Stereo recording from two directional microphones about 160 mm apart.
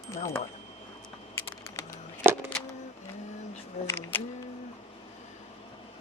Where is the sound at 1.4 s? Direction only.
15° left (ahead or behind).